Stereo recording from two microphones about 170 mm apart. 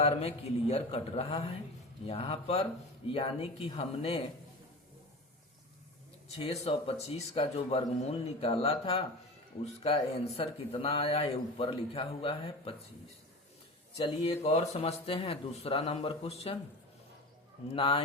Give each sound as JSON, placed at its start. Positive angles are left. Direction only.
{"t": 0.0, "sound": "speech", "side_deg": 35}
{"t": 6.2, "sound": "speech", "side_deg": 35}
{"t": 14.0, "sound": "speech", "side_deg": 35}
{"t": 17.7, "sound": "speech", "side_deg": 30}